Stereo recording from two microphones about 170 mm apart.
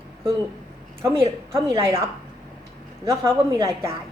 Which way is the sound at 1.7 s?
15° right (ahead or behind).